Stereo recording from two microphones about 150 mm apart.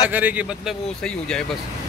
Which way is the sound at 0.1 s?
10° right (ahead or behind).